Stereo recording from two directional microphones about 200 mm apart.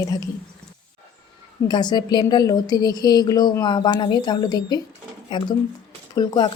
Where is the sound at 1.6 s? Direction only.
20° left (ahead or behind).